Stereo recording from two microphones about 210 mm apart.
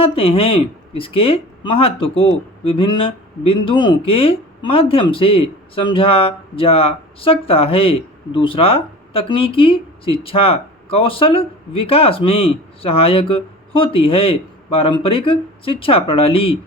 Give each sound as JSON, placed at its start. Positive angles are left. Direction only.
{"t": 0.0, "sound": "speech", "side_deg": 25}